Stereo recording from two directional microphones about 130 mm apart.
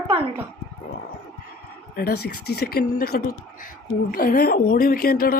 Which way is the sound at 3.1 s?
90° left.